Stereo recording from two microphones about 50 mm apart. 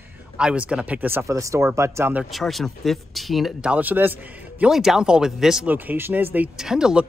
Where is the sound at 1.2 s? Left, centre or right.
Right.